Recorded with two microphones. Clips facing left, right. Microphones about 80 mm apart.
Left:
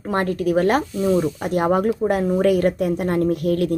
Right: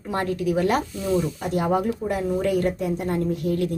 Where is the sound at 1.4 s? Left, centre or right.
Left.